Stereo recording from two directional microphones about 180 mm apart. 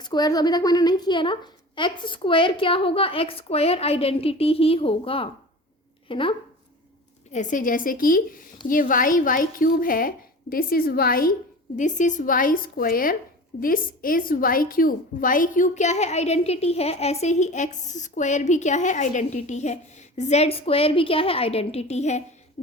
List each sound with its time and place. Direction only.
0.0 s a woman's voice: 20° left (ahead or behind)
7.3 s a woman's voice: 45° left (ahead or behind)
11.8 s a woman's voice: 45° left (ahead or behind)
22.6 s beatboxing: 35° left (ahead or behind)